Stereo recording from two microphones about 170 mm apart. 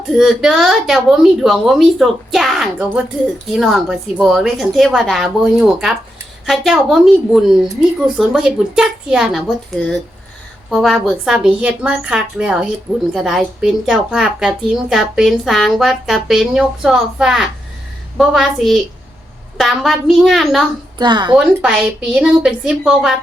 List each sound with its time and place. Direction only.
0.1 s a woman's voice: centre (ahead or behind)
21.0 s speech: 25° right (ahead or behind)
21.3 s a woman's voice: 5° right (ahead or behind)